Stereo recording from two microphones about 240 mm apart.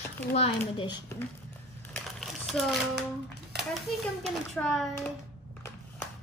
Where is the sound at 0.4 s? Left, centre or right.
Left.